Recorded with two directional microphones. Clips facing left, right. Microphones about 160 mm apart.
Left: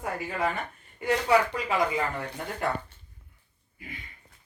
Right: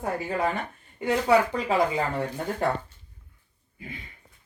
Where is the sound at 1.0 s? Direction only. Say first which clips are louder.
Right 2 dB; 30° right (ahead or behind).